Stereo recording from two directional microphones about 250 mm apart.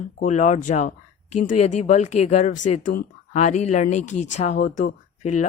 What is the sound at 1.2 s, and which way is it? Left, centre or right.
Speech, left.